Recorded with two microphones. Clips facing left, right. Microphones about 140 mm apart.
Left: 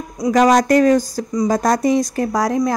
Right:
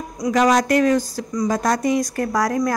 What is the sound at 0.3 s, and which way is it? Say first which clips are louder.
A woman's voice: left 4 dB; 45° left (ahead or behind).